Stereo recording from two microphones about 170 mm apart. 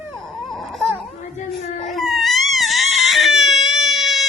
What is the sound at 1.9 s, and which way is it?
Crying, centre (ahead or behind).